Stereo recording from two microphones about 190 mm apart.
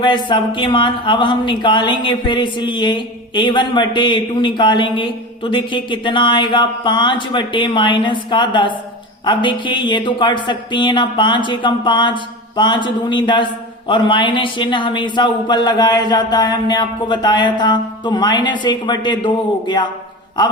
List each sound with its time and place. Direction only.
0.0 s speech: 25° left (ahead or behind)